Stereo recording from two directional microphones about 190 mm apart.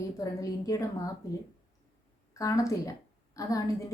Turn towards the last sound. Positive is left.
turn(degrees=15)  # may be behind; listen again after turning